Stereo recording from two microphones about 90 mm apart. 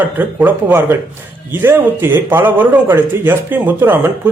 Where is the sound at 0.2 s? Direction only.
20° right (ahead or behind).